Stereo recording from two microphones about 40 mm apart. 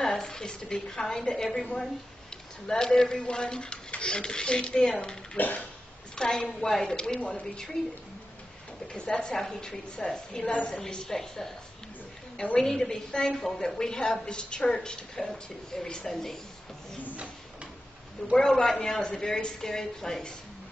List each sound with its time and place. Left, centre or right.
0.0 s a woman's voice: centre
5.4 s speech: left
6.1 s a woman's voice: centre
8.9 s a woman's voice: centre
12.5 s a woman's voice: centre
18.2 s a woman's voice: centre
18.9 s a woman's voice: left